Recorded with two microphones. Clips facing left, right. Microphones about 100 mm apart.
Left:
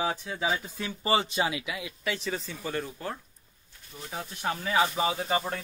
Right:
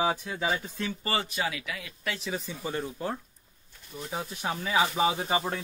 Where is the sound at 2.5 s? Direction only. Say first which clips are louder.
Even; 20° right (ahead or behind).